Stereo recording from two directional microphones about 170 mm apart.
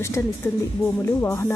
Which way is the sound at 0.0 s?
15° left (ahead or behind).